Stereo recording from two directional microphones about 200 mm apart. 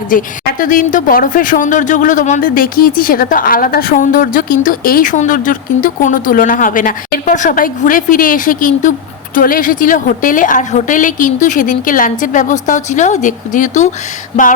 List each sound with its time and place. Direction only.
0.1 s a woman's voice: 45° left (ahead or behind)